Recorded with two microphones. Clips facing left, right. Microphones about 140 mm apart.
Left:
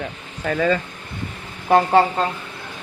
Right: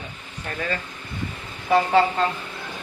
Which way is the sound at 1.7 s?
50° left (ahead or behind).